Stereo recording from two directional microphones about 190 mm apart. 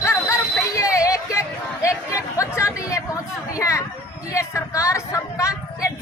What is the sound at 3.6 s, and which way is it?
A woman's voice, 15° left (ahead or behind).